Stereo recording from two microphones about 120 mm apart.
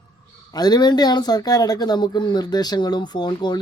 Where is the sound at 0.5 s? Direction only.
35° left (ahead or behind).